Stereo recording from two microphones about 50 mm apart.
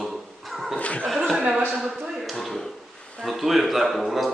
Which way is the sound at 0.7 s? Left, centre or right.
Left.